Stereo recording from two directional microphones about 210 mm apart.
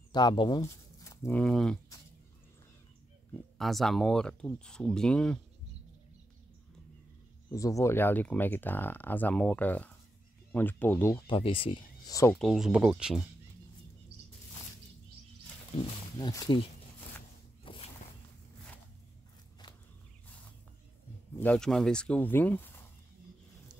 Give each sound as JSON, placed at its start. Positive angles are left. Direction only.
{"t": 0.1, "sound": "speech", "side_deg": 20}
{"t": 3.5, "sound": "speech", "side_deg": 0}
{"t": 7.5, "sound": "speech", "side_deg": 15}
{"t": 12.2, "sound": "speech", "side_deg": 5}
{"t": 14.1, "sound": "a sound", "side_deg": -55}
{"t": 15.7, "sound": "speech", "side_deg": 25}
{"t": 17.6, "sound": "a sound", "side_deg": 25}
{"t": 21.4, "sound": "speech", "side_deg": 5}